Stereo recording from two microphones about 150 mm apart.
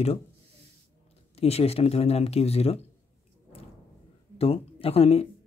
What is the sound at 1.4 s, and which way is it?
Speech, 40° left (ahead or behind).